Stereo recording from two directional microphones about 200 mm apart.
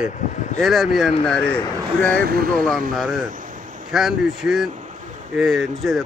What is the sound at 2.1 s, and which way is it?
Speech, 50° right (ahead or behind).